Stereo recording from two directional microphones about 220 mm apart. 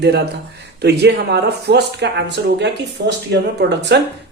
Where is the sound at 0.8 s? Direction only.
50° right (ahead or behind).